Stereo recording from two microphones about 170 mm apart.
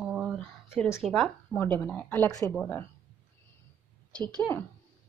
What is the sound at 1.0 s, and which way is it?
Speech, centre (ahead or behind).